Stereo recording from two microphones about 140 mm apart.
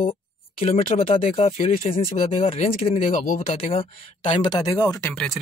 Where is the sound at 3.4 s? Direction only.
40° left (ahead or behind).